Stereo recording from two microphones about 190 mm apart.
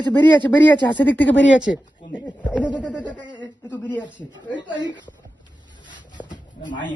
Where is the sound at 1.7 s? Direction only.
55° left (ahead or behind).